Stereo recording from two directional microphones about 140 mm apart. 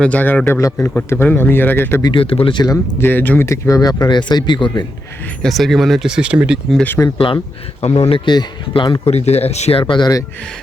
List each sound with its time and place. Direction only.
0.0 s speech: 10° left (ahead or behind)
2.0 s speech: 40° left (ahead or behind)
3.0 s speech: 15° left (ahead or behind); by 4.7 s 35° left (ahead or behind)
5.4 s speech: centre (ahead or behind)
6.7 s speech: 15° left (ahead or behind)
7.8 s speech: 50° left (ahead or behind)
8.2 s speech: 35° left (ahead or behind)